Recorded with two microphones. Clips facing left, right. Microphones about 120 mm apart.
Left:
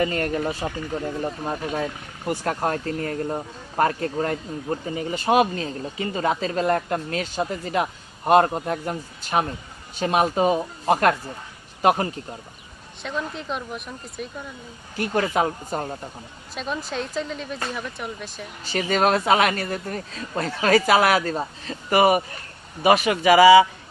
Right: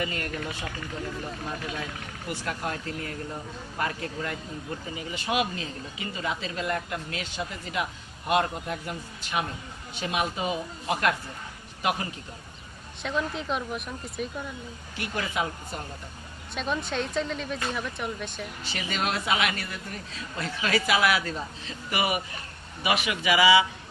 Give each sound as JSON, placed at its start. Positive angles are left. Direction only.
{"t": 0.0, "sound": "speech", "side_deg": 45}
{"t": 13.0, "sound": "speech", "side_deg": 0}
{"t": 14.9, "sound": "speech", "side_deg": 45}
{"t": 16.6, "sound": "speech", "side_deg": 0}
{"t": 18.6, "sound": "speech", "side_deg": 40}